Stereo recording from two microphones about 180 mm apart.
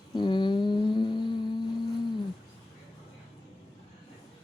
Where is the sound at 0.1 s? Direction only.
25° left (ahead or behind).